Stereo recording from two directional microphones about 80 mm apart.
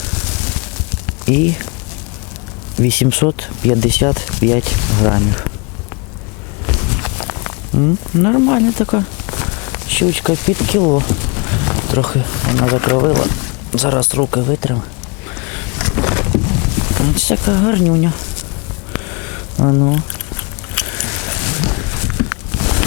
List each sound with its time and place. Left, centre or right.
1.2 s speech: centre
2.8 s speech: centre
6.7 s speech: centre
15.8 s a sound: centre
19.6 s speech: centre
20.7 s a sound: centre